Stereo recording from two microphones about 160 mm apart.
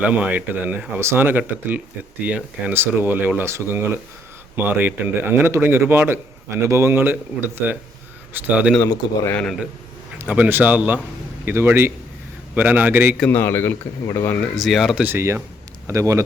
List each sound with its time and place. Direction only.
0.0 s a man's voice: 10° right (ahead or behind)
10.2 s a man's voice: 10° right (ahead or behind)
13.3 s speech: 15° left (ahead or behind)
14.5 s speech: centre (ahead or behind)
15.0 s a man's voice: 15° right (ahead or behind)